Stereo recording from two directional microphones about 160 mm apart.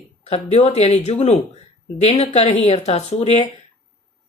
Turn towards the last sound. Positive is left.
turn(degrees=45)  # may be behind; listen again after turning